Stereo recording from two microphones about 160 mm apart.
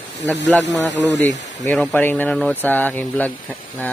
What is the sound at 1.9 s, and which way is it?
Speech, 10° left (ahead or behind).